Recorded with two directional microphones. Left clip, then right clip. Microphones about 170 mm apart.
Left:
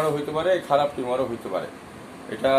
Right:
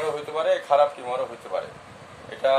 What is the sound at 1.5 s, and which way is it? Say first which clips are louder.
Speech: right 1 dB; 20° left (ahead or behind).